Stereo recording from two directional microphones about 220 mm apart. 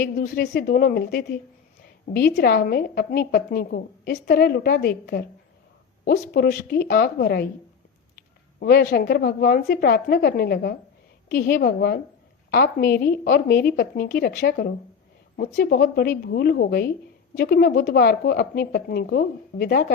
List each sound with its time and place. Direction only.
0.0 s a woman's voice: 45° left (ahead or behind)
8.5 s a woman's voice: 45° left (ahead or behind)